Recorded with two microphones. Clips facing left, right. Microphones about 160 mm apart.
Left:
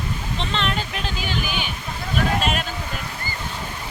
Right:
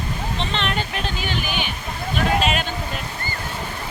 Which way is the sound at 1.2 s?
55° right (ahead or behind).